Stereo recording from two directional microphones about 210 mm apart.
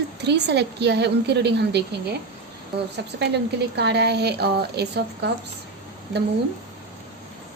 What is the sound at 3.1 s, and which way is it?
A woman's voice, 55° right (ahead or behind).